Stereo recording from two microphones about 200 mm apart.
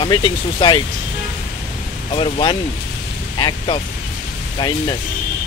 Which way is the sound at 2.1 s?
25° left (ahead or behind).